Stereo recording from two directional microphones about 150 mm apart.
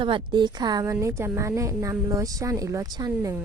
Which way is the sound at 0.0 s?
30° right (ahead or behind).